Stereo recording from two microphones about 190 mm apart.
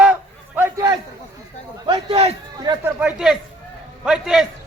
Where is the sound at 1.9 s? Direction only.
30° right (ahead or behind).